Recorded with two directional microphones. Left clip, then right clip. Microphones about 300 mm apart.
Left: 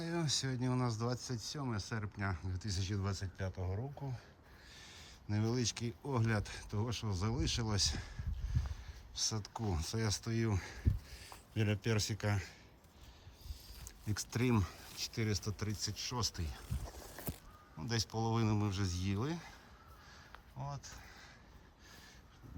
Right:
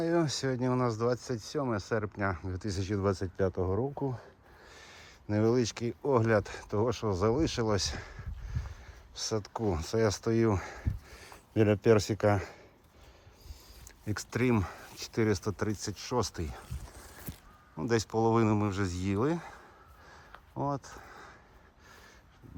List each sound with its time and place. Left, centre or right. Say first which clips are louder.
0.0 s speech: right 9 dB; centre
3.5 s speech: right 14 dB; right
4.7 s speech: right 3 dB; centre
14.0 s speech: right 7 dB; centre
17.7 s speech: right 10 dB; centre
20.7 s a sound: right 12 dB; centre